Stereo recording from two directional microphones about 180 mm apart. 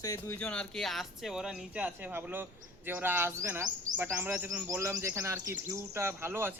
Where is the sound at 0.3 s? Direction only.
5° left (ahead or behind).